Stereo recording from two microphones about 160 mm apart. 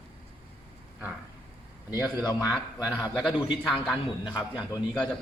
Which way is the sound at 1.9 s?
25° left (ahead or behind).